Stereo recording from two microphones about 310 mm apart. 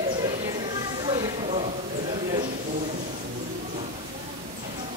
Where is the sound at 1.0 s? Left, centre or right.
Centre.